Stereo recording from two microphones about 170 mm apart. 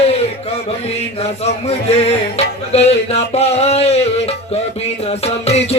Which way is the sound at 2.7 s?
40° left (ahead or behind).